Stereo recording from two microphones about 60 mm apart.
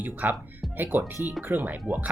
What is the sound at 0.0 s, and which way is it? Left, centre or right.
Speech, right.